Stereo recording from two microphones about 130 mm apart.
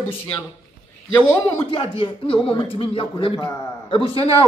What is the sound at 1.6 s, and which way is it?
Speech, 35° left (ahead or behind).